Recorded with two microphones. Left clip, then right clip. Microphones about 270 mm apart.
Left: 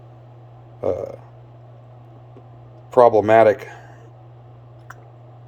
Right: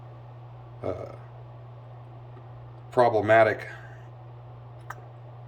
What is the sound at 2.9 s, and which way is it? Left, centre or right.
Speech, left.